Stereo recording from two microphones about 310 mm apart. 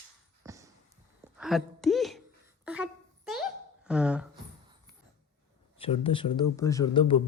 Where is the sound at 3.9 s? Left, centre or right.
Centre.